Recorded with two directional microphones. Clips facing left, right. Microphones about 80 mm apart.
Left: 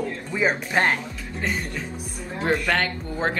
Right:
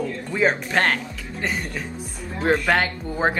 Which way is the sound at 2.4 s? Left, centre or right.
Centre.